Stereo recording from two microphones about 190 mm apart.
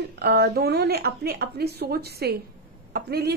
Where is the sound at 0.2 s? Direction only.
55° right (ahead or behind).